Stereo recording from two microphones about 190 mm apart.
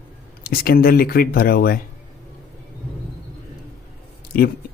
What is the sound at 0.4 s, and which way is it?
Speech, 55° left (ahead or behind).